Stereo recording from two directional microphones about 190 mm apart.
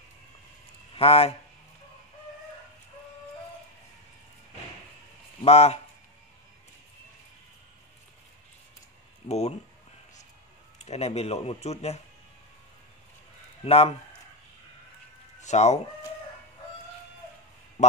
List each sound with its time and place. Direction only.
0.9 s speech: 30° left (ahead or behind)
5.4 s speech: 30° left (ahead or behind)
9.3 s speech: 35° left (ahead or behind)
10.8 s speech: 35° left (ahead or behind)
13.7 s speech: 30° left (ahead or behind)
15.4 s speech: 35° left (ahead or behind)